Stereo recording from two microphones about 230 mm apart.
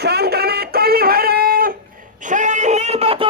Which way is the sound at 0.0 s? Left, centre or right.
Right.